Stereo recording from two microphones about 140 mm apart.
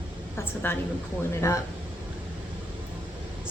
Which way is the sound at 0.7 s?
15° left (ahead or behind).